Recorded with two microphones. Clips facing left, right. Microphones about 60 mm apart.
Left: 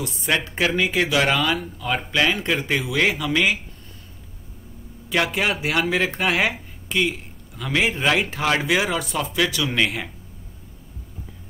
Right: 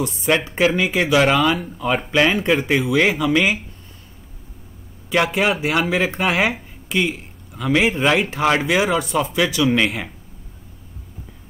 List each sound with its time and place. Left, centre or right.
0.0 s speech: centre
5.1 s speech: centre
8.4 s speech: centre
8.6 s speech: centre